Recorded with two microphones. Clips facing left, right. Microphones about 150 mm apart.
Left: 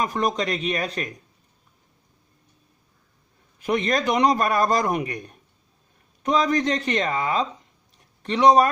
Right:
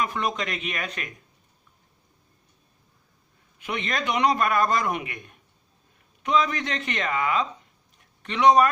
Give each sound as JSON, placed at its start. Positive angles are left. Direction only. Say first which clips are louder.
{"t": 0.0, "sound": "a man's voice", "louder": "left 4 dB", "side_deg": 40}
{"t": 3.6, "sound": "a man's voice", "louder": "left 7 dB", "side_deg": 40}